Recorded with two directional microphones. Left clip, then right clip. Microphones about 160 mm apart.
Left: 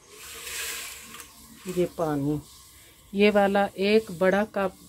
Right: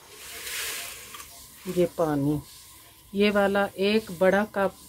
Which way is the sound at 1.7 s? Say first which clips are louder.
Right 2 dB; 15° right (ahead or behind).